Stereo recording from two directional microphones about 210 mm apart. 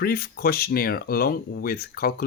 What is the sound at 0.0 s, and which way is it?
Speech, 45° left (ahead or behind).